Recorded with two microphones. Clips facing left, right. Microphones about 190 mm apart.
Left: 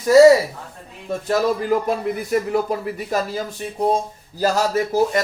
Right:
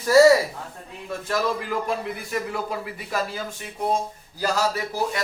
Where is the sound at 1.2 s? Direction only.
40° left (ahead or behind).